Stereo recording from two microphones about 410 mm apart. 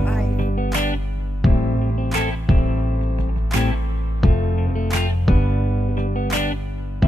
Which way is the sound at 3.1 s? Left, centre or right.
Right.